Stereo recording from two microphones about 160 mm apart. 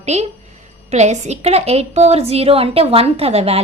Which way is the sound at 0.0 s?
45° right (ahead or behind).